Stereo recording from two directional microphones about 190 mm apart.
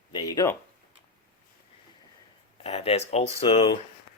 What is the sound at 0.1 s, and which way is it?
Speech, 20° left (ahead or behind).